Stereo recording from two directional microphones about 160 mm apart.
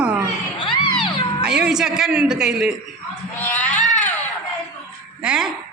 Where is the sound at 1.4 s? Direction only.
5° right (ahead or behind).